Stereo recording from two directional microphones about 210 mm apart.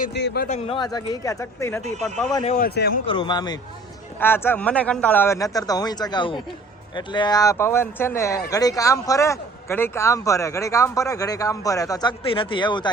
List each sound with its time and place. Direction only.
0.0 s a man's voice: 55° left (ahead or behind)
0.4 s speech: 35° left (ahead or behind)
0.8 s a man's voice: 20° left (ahead or behind)
2.4 s speech: 30° left (ahead or behind)
2.6 s a man's voice: 50° left (ahead or behind)
3.1 s a man's voice: 20° left (ahead or behind)